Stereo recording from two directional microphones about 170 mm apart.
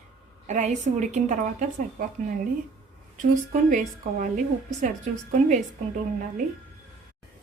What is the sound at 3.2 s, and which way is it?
Speech, 50° right (ahead or behind).